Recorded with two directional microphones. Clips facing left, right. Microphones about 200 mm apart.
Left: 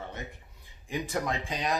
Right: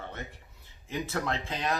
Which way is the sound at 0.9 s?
15° left (ahead or behind).